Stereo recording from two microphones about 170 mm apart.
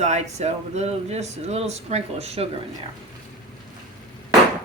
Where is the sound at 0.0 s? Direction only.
40° right (ahead or behind).